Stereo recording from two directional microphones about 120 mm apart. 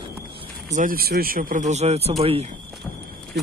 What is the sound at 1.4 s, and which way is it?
Speech, 85° right.